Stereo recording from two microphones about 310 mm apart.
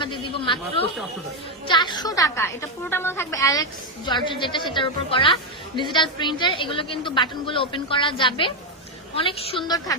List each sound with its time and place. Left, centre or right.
0.0 s chatter: centre
1.6 s a woman's voice: centre